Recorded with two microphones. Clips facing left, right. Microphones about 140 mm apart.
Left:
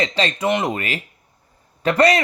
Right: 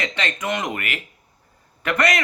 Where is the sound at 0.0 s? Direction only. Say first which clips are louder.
Left 6 dB; 30° left (ahead or behind).